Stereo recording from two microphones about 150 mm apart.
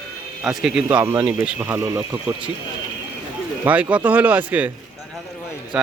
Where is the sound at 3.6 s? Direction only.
10° right (ahead or behind).